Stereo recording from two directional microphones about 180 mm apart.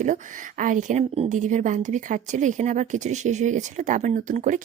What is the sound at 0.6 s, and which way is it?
Speech, 45° right (ahead or behind).